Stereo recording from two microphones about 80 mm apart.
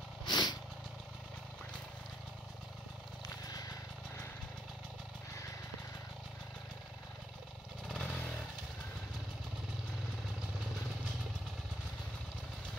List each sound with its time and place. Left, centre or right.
0.2 s vehicle: left
3.4 s vehicle: left
7.9 s motorcycle: centre